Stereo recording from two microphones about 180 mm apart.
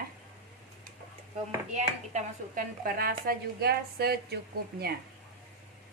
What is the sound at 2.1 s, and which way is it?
A woman's voice, 45° right (ahead or behind).